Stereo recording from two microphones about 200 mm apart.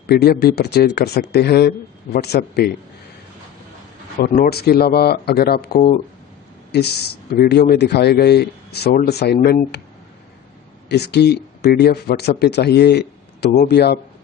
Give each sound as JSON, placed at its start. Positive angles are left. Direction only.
{"t": 0.1, "sound": "speech", "side_deg": 50}
{"t": 4.2, "sound": "speech", "side_deg": 50}
{"t": 10.8, "sound": "speech", "side_deg": 55}